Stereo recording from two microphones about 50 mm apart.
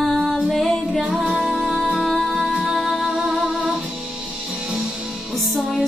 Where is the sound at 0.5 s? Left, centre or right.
Centre.